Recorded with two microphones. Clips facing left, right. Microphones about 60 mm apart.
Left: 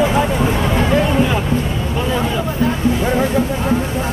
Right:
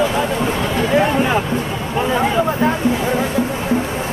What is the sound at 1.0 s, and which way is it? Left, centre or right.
Music, right.